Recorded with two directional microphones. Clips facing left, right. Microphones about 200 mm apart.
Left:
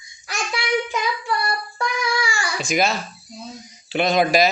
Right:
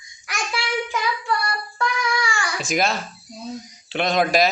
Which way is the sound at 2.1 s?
10° left (ahead or behind).